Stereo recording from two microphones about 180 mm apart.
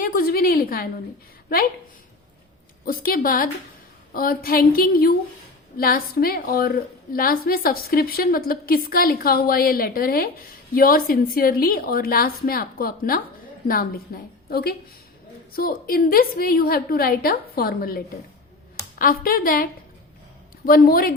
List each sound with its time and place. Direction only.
0.0 s a woman's voice: 55° left (ahead or behind)
2.8 s a woman's voice: 55° left (ahead or behind)